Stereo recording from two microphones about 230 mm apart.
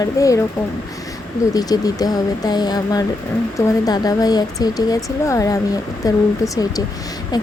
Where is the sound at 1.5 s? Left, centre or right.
Centre.